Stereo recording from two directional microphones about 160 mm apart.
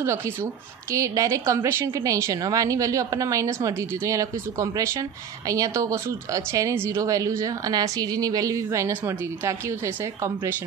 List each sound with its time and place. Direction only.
0.9 s speech: 20° right (ahead or behind)